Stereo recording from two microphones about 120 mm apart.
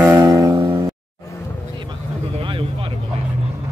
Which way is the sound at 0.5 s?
40° right (ahead or behind).